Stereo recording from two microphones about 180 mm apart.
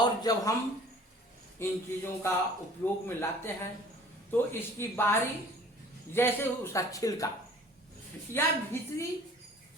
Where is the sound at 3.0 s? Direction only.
10° left (ahead or behind).